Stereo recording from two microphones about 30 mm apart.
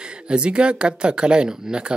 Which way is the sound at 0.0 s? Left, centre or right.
Right.